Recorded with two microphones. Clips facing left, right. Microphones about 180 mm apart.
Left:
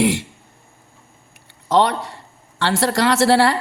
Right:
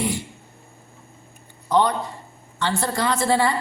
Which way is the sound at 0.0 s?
90° left.